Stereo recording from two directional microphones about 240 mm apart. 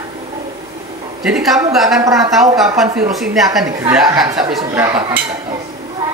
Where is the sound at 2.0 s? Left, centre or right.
Centre.